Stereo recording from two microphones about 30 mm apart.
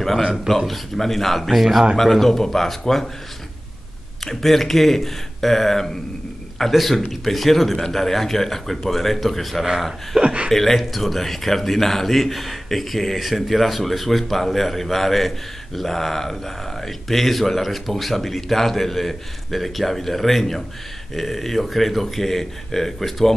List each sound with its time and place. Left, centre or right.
0.5 s speech: centre
1.6 s speech: centre
2.0 s speech: centre
4.2 s speech: centre
6.7 s speech: centre
10.2 s speech: right
10.5 s speech: centre